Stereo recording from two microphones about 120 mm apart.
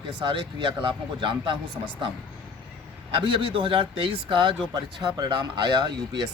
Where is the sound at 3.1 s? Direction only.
45° right (ahead or behind).